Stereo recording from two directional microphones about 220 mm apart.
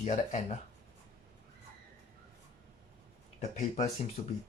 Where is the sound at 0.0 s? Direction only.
30° left (ahead or behind).